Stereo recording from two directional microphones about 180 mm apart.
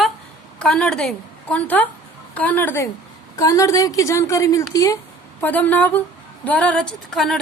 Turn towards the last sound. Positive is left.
turn(degrees=0)  # may be behind; listen again after turning